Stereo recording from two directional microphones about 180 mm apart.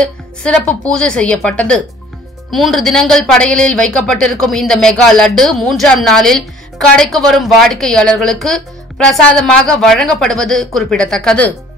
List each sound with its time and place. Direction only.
0.0 s speech: 5° left (ahead or behind)